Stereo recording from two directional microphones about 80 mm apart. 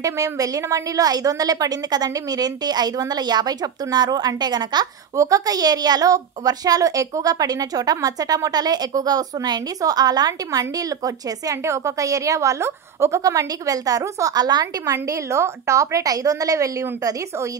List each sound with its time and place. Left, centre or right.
0.0 s a woman's voice: right
5.1 s a woman's voice: right
11.6 s a woman's voice: right
13.2 s a woman's voice: right
14.9 s a woman's voice: right